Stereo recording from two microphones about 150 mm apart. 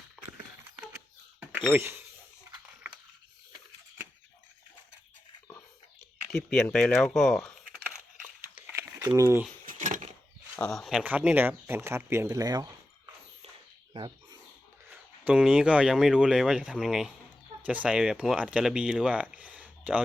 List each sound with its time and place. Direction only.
1.7 s speech: 15° right (ahead or behind)
6.3 s speech: centre (ahead or behind)
8.5 s a sound: 10° right (ahead or behind)
9.0 s speech: 20° right (ahead or behind)
9.6 s a sound: 60° right (ahead or behind)
10.5 s speech: 5° left (ahead or behind); by 12.7 s 25° right (ahead or behind)
13.9 s bird: 35° right (ahead or behind)
14.8 s speech: 10° right (ahead or behind)